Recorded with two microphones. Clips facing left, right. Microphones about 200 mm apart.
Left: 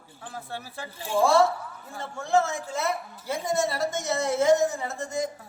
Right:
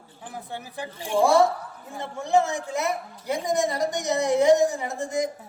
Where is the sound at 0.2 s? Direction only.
15° right (ahead or behind).